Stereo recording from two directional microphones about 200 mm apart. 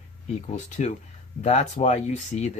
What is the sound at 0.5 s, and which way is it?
Speech, 35° left (ahead or behind).